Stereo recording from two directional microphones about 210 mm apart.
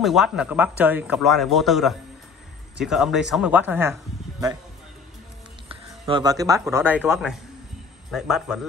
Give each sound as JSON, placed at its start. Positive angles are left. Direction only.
{"t": 0.0, "sound": "a man's voice", "side_deg": 0}
{"t": 5.7, "sound": "a sound", "side_deg": -25}
{"t": 6.7, "sound": "a man's voice", "side_deg": -10}